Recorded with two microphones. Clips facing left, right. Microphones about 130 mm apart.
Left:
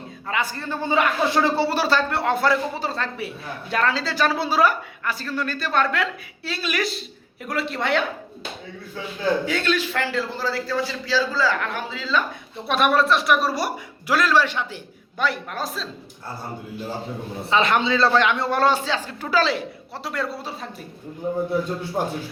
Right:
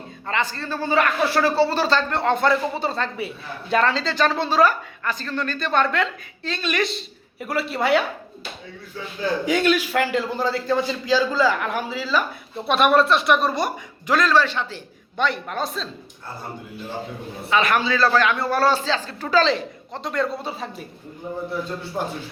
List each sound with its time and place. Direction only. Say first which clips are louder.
0.3 s a man's voice: right 1 dB; 10° left (ahead or behind); by 8.0 s 5° right (ahead or behind)
9.5 s a man's voice: right 4 dB; 15° right (ahead or behind); by 14.8 s 15° left (ahead or behind)
15.2 s speech: right 2 dB; 5° left (ahead or behind)
17.5 s a man's voice: even; 25° left (ahead or behind); by 20.7 s centre (ahead or behind)